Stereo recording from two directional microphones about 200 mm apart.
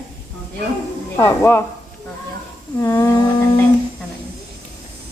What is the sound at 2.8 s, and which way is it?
Speech, 10° left (ahead or behind).